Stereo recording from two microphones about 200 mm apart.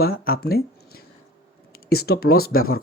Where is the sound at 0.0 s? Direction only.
50° left (ahead or behind).